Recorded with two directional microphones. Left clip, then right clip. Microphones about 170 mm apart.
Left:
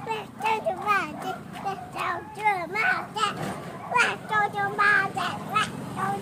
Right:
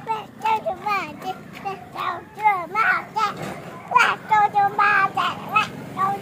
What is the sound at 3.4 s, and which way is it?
Children playing, 10° left (ahead or behind).